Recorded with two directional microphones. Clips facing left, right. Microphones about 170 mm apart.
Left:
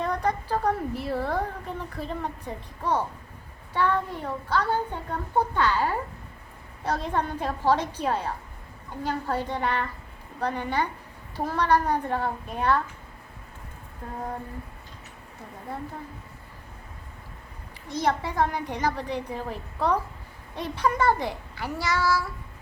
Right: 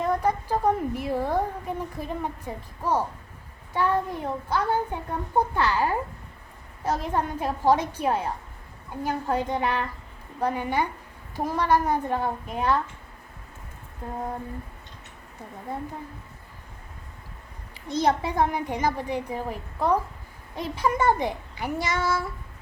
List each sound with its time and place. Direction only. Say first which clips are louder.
0.0 s a woman's voice: right 2 dB; 10° right (ahead or behind)
17.8 s a woman's voice: right 3 dB; 20° right (ahead or behind)